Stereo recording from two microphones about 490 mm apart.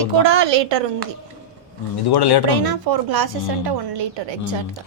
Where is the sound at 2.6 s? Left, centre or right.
Right.